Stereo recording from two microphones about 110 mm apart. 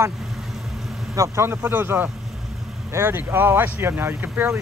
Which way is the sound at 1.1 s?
25° right (ahead or behind).